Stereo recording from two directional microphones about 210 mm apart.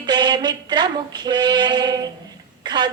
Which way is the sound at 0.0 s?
20° right (ahead or behind).